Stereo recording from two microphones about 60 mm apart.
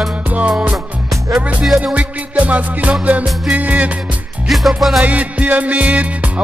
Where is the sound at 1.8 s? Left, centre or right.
Right.